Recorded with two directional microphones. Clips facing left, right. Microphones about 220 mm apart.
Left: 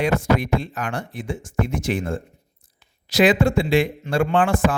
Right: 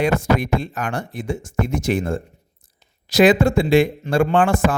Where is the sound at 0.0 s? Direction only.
45° right (ahead or behind).